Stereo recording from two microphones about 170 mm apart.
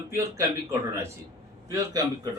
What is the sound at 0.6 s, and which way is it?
A man's voice, 15° right (ahead or behind).